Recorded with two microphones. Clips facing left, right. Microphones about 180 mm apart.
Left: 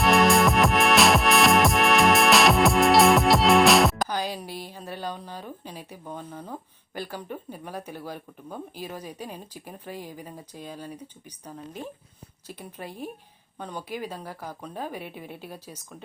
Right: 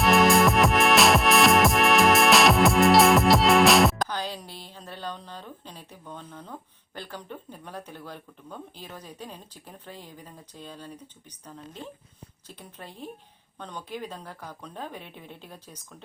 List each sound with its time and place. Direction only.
0.0 s music: centre (ahead or behind)
4.1 s a woman's voice: 10° left (ahead or behind)